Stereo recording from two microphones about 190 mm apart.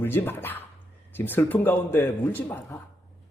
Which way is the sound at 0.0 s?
10° left (ahead or behind).